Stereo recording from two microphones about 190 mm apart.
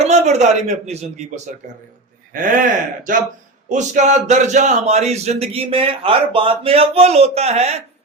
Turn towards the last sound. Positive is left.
turn(degrees=-35)  # may be behind; listen again after turning